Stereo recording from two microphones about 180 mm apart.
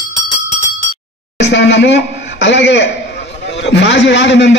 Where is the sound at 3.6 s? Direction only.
75° left (ahead or behind).